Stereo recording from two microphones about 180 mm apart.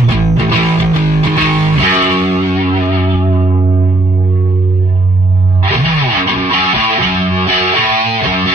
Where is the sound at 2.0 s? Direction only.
40° right (ahead or behind).